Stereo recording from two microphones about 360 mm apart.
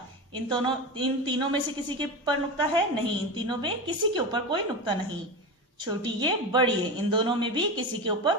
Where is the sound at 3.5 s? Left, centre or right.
Centre.